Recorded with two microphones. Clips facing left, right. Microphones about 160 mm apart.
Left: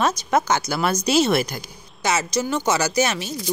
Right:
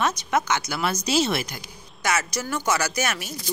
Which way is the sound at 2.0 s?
25° left (ahead or behind).